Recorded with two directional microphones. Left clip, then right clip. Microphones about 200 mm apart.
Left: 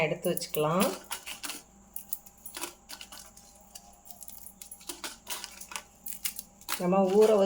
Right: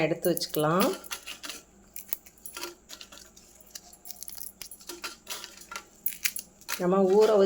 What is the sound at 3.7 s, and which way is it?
Keys jangling, 25° right (ahead or behind).